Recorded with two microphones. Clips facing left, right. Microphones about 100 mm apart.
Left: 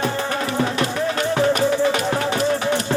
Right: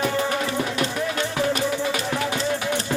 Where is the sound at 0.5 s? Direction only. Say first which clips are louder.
Left 3 dB; 35° left (ahead or behind).